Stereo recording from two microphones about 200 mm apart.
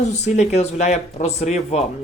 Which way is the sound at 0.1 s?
35° left (ahead or behind).